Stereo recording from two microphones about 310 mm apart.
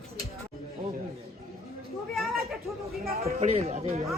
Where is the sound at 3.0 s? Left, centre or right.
Right.